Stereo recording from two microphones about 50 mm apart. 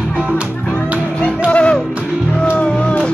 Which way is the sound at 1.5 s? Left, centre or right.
Left.